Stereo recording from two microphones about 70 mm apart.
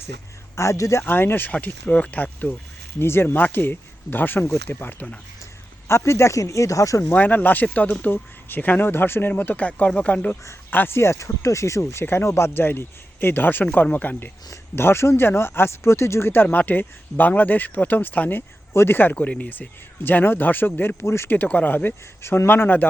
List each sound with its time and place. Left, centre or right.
0.5 s speech: left
1.0 s speech: left
1.5 s speech: centre
5.9 s speech: left
7.1 s speech: left
10.7 s speech: left
14.8 s speech: left
21.3 s speech: left